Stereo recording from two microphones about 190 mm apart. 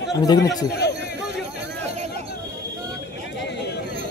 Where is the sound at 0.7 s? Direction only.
60° left (ahead or behind).